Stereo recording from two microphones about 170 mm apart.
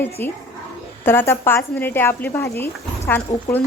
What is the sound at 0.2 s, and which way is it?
Speech, 10° left (ahead or behind).